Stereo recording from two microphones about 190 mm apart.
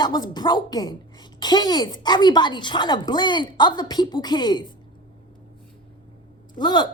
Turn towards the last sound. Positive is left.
turn(degrees=25)  # may be behind; listen again after turning